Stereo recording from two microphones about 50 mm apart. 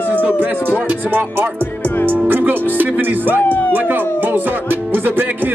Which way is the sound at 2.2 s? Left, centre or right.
Right.